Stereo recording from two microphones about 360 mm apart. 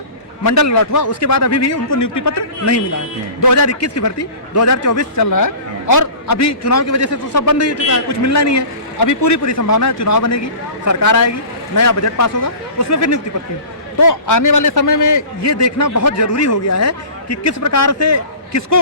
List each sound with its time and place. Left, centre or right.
0.4 s a man's voice: left
1.0 s a man's voice: left
8.2 s a man's voice: left
14.0 s a man's voice: left